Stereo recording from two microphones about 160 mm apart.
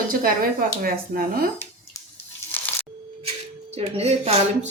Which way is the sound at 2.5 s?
10° left (ahead or behind).